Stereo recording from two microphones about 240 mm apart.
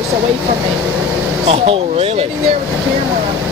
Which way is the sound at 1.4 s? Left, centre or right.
Right.